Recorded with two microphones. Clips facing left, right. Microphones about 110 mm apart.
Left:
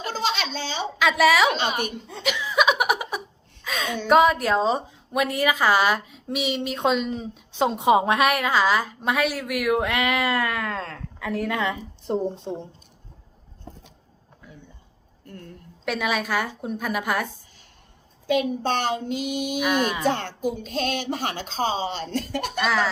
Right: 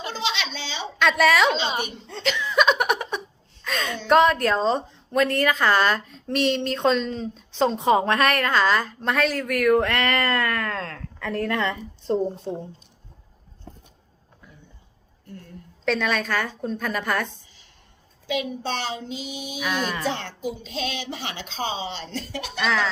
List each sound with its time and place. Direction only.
0.1 s a sound: 45° left (ahead or behind)
0.9 s a woman's voice: 5° left (ahead or behind)
2.0 s laughter: 10° left (ahead or behind)
3.6 s a woman's voice: centre (ahead or behind)
12.0 s a woman's voice: 15° left (ahead or behind)
15.8 s a woman's voice: 10° left (ahead or behind)
18.3 s speech: 50° left (ahead or behind)
19.5 s a woman's voice: 10° left (ahead or behind)
20.1 s speech: 45° left (ahead or behind)
22.6 s a woman's voice: 5° left (ahead or behind)